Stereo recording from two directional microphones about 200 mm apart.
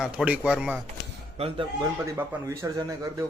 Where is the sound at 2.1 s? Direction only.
15° right (ahead or behind).